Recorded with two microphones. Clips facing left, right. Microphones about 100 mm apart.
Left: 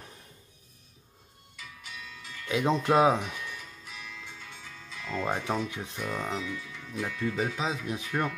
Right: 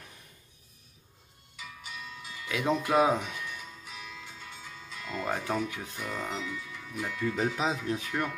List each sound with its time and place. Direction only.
2.4 s speech: 25° left (ahead or behind)
3.5 s music: 5° right (ahead or behind)
5.2 s speech: 20° left (ahead or behind)
5.9 s speech: 5° right (ahead or behind)
7.8 s speech: 15° left (ahead or behind)